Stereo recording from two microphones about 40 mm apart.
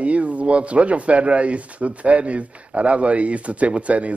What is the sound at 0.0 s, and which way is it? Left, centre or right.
Speech, right.